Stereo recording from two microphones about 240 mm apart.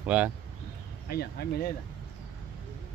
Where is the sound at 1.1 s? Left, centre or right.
Left.